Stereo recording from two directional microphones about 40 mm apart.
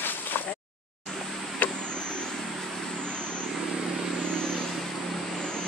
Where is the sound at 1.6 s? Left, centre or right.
Left.